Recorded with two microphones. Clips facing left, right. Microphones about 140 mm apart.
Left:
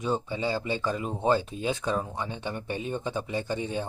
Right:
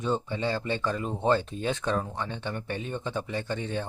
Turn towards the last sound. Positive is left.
turn(degrees=10)  # may be behind; listen again after turning